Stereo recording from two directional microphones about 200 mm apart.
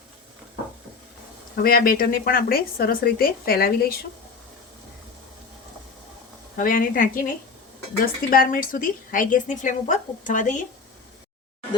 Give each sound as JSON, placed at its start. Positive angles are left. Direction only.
{"t": 1.5, "sound": "a woman's voice", "side_deg": 45}
{"t": 6.6, "sound": "a woman's voice", "side_deg": 45}